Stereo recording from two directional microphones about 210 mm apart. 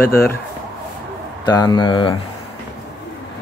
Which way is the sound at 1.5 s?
20° left (ahead or behind).